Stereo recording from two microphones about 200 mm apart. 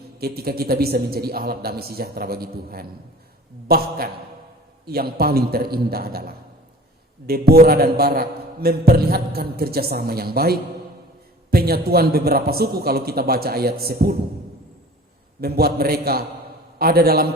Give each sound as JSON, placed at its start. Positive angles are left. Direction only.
{"t": 0.2, "sound": "a man's voice", "side_deg": -50}
{"t": 15.4, "sound": "a man's voice", "side_deg": -50}